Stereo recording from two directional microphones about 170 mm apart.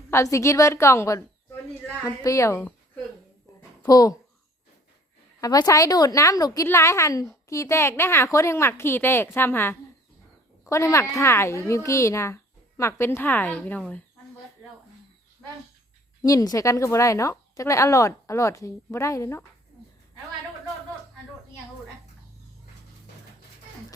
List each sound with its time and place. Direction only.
0.1 s a woman's voice: 15° left (ahead or behind)
3.8 s a woman's voice: 20° left (ahead or behind)
5.4 s a woman's voice: 20° left (ahead or behind)
16.2 s a woman's voice: 20° left (ahead or behind)